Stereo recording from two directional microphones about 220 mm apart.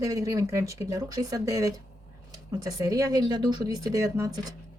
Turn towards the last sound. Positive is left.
turn(degrees=-15)  # may be behind; listen again after turning